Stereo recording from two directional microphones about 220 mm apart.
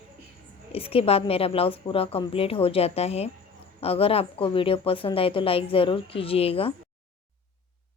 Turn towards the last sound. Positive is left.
turn(degrees=25)  # may be behind; listen again after turning